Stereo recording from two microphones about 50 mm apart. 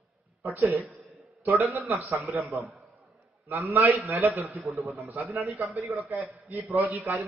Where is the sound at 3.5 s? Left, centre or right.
Right.